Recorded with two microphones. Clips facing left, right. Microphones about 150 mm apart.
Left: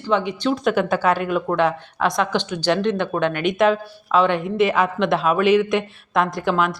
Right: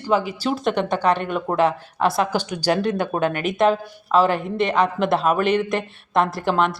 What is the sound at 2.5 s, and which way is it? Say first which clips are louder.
Speech: left 1 dB; 40° right (ahead or behind).